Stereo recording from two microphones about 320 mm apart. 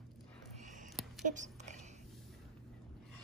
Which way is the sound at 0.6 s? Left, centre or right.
Right.